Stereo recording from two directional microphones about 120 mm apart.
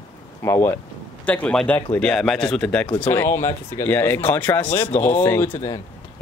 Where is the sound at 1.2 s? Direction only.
10° left (ahead or behind).